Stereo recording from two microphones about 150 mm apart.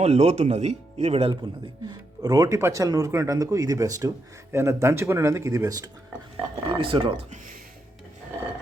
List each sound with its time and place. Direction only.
0.0 s speech: 45° right (ahead or behind)
1.9 s speech: 25° right (ahead or behind)
6.7 s speech: 35° right (ahead or behind)